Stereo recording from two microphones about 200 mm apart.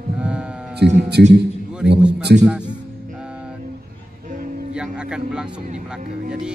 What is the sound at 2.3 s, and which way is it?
Speech, 50° right (ahead or behind).